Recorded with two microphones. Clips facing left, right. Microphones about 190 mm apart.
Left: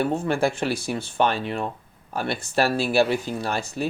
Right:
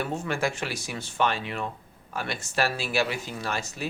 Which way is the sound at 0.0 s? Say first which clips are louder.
Left 6 dB; 30° left (ahead or behind).